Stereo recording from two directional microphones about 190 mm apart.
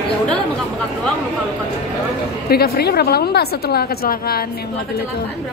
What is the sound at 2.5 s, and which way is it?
A woman's voice, 55° left (ahead or behind).